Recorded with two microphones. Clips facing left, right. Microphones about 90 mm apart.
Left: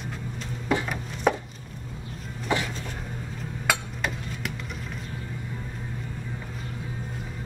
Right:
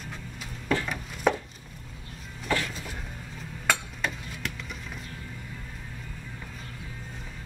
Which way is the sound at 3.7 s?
5° left (ahead or behind).